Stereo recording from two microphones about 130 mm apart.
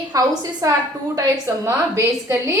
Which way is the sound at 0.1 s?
25° right (ahead or behind).